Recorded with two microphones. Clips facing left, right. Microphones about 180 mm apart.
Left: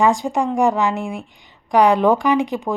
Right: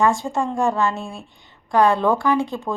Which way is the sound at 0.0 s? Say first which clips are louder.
Left 2 dB; 15° left (ahead or behind).